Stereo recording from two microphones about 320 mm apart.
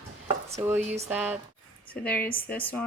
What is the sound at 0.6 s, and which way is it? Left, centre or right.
Speech, centre.